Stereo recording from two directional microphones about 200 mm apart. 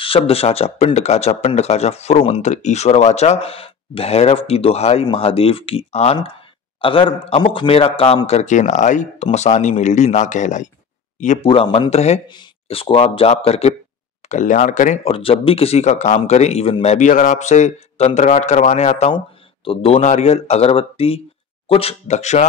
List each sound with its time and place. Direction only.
0.0 s speech: 30° left (ahead or behind)
11.4 s speech: 25° left (ahead or behind)
15.1 s speech: 25° left (ahead or behind)